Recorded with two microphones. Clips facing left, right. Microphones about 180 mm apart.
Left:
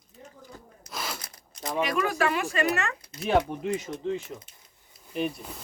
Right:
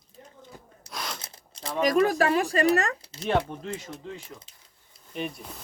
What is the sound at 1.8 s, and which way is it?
Speech, 40° right (ahead or behind).